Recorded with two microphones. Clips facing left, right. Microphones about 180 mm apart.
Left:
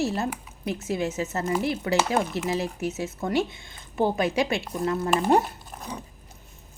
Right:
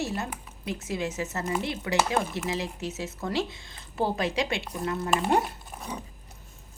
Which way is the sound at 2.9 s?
25° left (ahead or behind).